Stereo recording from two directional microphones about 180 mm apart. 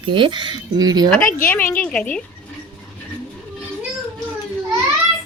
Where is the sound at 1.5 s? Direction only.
15° left (ahead or behind).